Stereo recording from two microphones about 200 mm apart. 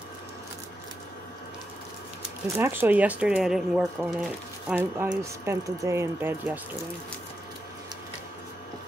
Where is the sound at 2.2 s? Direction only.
10° right (ahead or behind).